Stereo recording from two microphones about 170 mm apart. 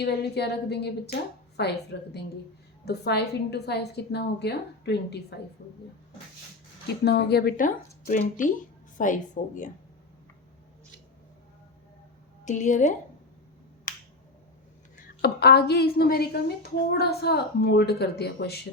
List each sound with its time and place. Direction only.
0.0 s a woman's voice: 75° left (ahead or behind)
6.8 s speech: 75° left (ahead or behind); by 9.6 s 50° left (ahead or behind)
12.5 s speech: 45° left (ahead or behind)
13.9 s finger snapping: 50° left (ahead or behind)
14.9 s a woman's voice: 60° left (ahead or behind)